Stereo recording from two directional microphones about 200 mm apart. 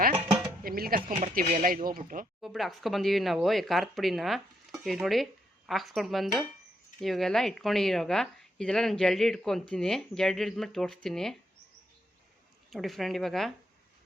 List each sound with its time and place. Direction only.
0.3 s music: 5° right (ahead or behind)
0.6 s speech: 45° right (ahead or behind)
2.4 s speech: centre (ahead or behind)
12.7 s speech: centre (ahead or behind)